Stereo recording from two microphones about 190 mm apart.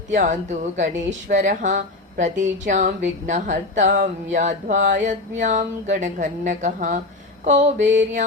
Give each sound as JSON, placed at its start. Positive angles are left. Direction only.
{"t": 0.1, "sound": "a woman's voice", "side_deg": -40}